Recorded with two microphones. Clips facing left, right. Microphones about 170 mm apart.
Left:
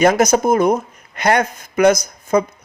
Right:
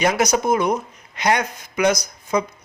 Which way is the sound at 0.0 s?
50° left (ahead or behind).